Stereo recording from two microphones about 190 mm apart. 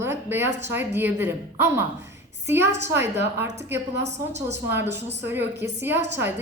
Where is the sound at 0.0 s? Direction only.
15° right (ahead or behind).